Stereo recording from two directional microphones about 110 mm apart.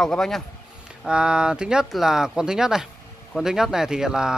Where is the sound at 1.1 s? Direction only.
5° right (ahead or behind).